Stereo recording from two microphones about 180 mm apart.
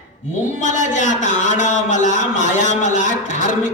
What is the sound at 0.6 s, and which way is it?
A man's voice, 45° left (ahead or behind).